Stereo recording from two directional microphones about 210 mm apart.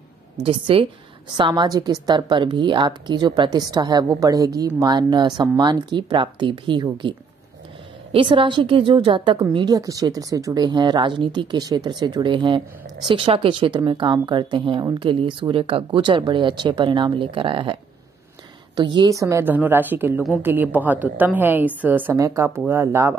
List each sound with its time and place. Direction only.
0.4 s a woman's voice: 25° right (ahead or behind)
18.8 s a woman's voice: 20° right (ahead or behind)